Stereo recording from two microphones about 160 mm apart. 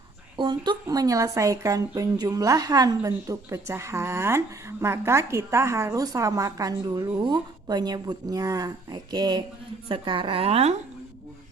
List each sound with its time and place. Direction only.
0.3 s a woman's voice: 30° right (ahead or behind)